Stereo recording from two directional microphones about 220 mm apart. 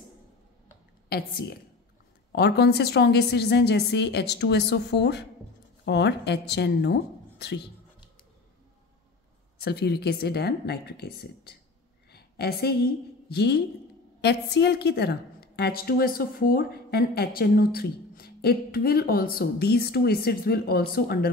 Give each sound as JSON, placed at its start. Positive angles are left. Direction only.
{"t": 1.0, "sound": "a woman's voice", "side_deg": 45}
{"t": 9.6, "sound": "a woman's voice", "side_deg": 50}